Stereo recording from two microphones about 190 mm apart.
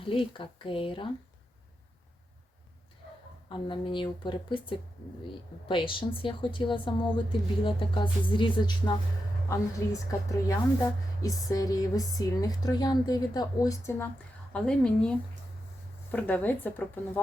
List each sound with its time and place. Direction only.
0.0 s a woman's voice: 30° left (ahead or behind)
3.5 s a woman's voice: 25° left (ahead or behind)
14.5 s speech: 5° left (ahead or behind)
16.1 s speech: 10° left (ahead or behind)